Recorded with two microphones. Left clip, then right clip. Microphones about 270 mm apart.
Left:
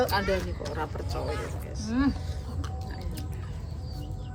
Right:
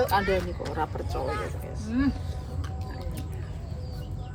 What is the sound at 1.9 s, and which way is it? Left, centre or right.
Speech, centre.